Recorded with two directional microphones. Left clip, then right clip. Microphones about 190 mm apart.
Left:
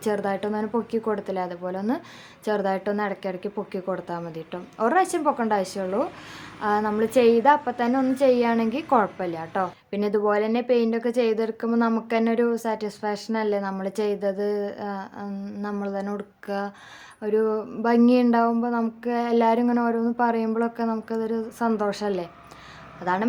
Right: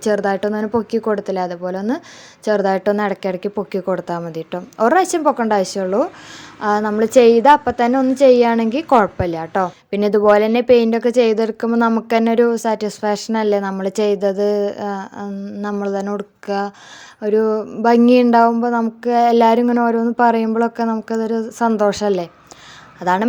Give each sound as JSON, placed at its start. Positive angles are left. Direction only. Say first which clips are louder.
{"t": 0.0, "sound": "a woman's voice", "louder": "right 8 dB", "side_deg": -30}